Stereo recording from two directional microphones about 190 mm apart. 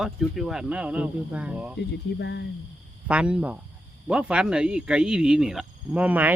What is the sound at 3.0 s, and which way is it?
Speech, 5° right (ahead or behind).